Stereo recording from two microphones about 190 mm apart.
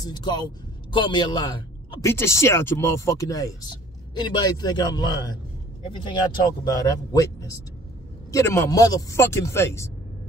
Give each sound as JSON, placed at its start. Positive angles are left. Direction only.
{"t": 0.0, "sound": "a man's voice", "side_deg": 20}
{"t": 2.0, "sound": "a man's voice", "side_deg": 15}
{"t": 6.6, "sound": "speech", "side_deg": 20}